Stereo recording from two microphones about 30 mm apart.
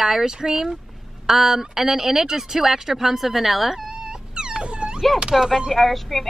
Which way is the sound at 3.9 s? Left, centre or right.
Right.